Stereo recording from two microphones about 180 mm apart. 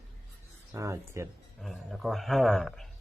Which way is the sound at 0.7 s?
15° right (ahead or behind).